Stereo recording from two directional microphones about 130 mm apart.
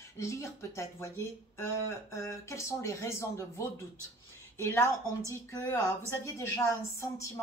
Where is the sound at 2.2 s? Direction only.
25° left (ahead or behind).